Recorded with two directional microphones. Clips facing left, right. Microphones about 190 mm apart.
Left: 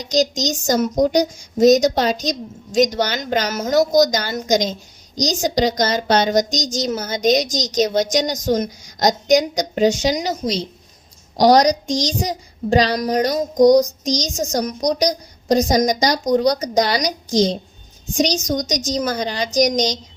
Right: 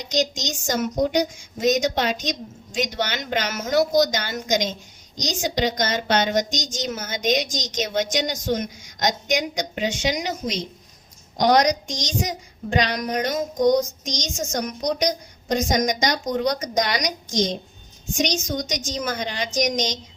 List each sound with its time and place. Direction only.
0.1 s a woman's voice: 40° left (ahead or behind)